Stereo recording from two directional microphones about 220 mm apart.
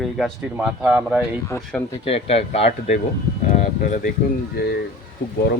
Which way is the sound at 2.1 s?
25° left (ahead or behind).